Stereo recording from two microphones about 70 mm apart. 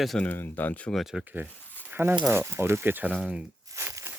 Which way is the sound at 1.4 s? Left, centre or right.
Left.